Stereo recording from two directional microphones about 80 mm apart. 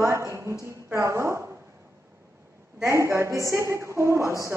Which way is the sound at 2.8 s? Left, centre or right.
Right.